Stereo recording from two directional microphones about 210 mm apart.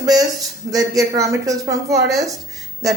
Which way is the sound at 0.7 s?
15° right (ahead or behind).